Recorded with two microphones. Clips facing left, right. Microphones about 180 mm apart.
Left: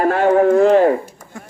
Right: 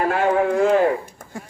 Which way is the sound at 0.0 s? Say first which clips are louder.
Left 5 dB; 45° left (ahead or behind).